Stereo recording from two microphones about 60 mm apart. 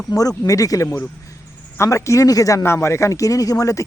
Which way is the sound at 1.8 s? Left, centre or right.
Left.